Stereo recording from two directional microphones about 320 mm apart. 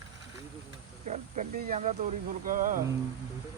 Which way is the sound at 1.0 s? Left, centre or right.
Right.